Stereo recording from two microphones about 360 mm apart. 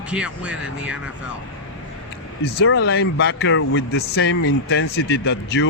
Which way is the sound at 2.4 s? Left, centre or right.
Left.